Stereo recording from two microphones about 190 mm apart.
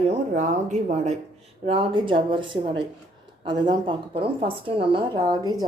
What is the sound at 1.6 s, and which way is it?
A woman's voice, 30° right (ahead or behind).